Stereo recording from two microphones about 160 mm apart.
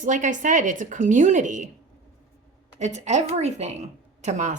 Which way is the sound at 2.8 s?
45° right (ahead or behind).